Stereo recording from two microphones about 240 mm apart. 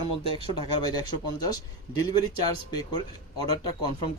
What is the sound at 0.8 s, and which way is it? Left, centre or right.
Speech, centre.